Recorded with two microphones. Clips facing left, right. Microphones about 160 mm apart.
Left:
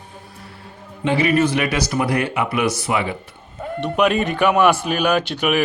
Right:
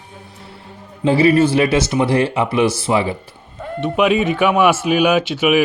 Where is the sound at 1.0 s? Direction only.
30° right (ahead or behind).